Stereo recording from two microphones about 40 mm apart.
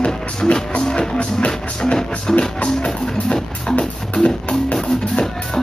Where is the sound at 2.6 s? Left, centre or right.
Left.